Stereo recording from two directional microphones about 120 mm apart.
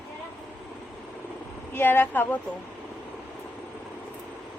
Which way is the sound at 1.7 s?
15° left (ahead or behind).